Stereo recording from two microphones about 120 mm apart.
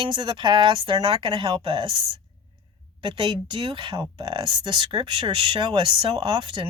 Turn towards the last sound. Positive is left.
turn(degrees=-45)  # may be behind; listen again after turning